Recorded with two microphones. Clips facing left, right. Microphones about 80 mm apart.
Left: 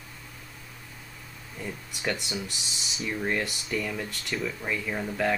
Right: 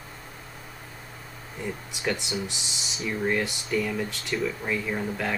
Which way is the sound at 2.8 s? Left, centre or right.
Centre.